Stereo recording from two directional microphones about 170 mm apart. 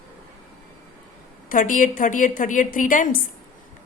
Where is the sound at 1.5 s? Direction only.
50° left (ahead or behind).